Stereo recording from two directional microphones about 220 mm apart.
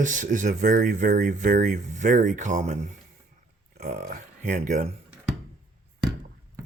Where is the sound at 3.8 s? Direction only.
35° right (ahead or behind).